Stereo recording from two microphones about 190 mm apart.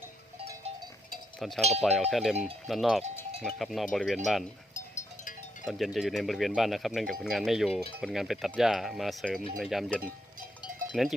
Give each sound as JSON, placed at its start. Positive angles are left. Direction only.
{"t": 1.4, "sound": "cowbell", "side_deg": 0}
{"t": 1.8, "sound": "speech", "side_deg": 0}
{"t": 4.7, "sound": "sheep", "side_deg": 40}
{"t": 5.6, "sound": "speech", "side_deg": 0}